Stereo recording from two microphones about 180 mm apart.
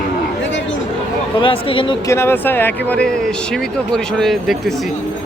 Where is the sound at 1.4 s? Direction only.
30° left (ahead or behind).